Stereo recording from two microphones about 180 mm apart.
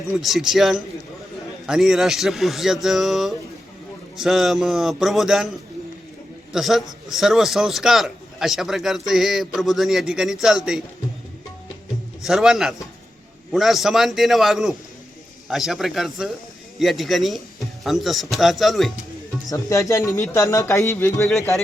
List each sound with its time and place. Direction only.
0.1 s a man's voice: centre (ahead or behind)
6.5 s a man's voice: centre (ahead or behind)
12.2 s a man's voice: centre (ahead or behind)
19.5 s speech: 20° left (ahead or behind)